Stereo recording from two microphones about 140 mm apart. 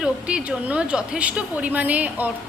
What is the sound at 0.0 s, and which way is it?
A woman's voice, 5° right (ahead or behind).